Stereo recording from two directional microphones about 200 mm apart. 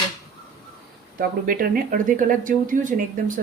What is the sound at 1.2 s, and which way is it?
Speech, 45° right (ahead or behind).